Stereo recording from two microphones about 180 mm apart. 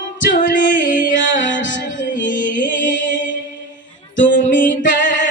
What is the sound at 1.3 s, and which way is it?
Music, 45° left (ahead or behind).